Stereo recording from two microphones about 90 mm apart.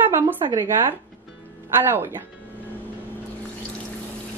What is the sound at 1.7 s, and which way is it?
Speech, 25° right (ahead or behind).